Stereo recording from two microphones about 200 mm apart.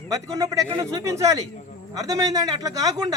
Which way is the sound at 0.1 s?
15° right (ahead or behind).